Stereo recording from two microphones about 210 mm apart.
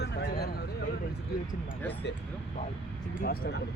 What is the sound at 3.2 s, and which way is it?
Speech, 50° left (ahead or behind).